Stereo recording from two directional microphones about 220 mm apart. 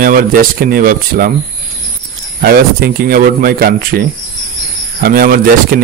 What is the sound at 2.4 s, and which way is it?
Speech, 45° right (ahead or behind).